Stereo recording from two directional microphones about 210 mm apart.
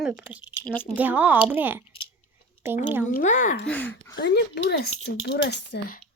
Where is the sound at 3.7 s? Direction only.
10° left (ahead or behind).